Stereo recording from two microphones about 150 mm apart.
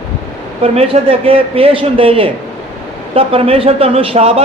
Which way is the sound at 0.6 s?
40° right (ahead or behind).